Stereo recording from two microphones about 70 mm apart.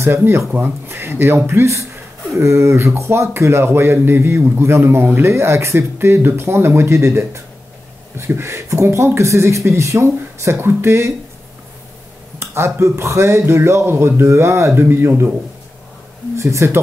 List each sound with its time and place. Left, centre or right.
0.0 s speech: right
12.4 s speech: right
16.3 s speech: right